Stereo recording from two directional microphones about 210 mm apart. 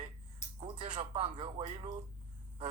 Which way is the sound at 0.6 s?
20° right (ahead or behind).